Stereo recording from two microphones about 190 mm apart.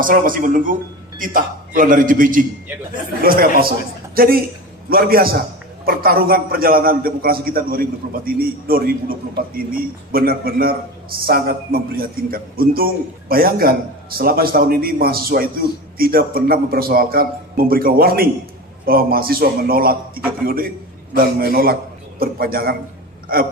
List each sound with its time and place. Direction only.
0.0 s a man's voice: 45° right (ahead or behind)
3.6 s a woman's voice: 50° right (ahead or behind)